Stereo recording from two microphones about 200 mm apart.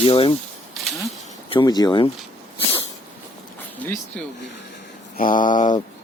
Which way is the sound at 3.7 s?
10° left (ahead or behind).